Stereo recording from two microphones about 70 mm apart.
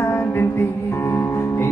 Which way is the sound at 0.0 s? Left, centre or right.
Left.